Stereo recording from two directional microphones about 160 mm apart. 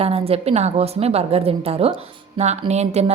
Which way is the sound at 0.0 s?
40° right (ahead or behind).